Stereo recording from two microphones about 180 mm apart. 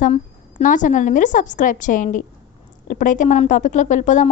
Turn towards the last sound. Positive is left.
turn(degrees=40)  # may be behind; listen again after turning